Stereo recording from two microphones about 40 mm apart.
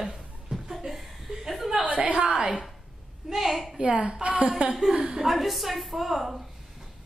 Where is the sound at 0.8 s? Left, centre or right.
Centre.